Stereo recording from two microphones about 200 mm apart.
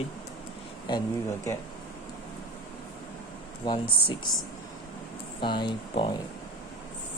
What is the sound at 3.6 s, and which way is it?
Speech, 25° left (ahead or behind).